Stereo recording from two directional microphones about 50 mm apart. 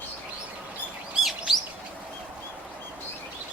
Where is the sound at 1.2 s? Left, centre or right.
Centre.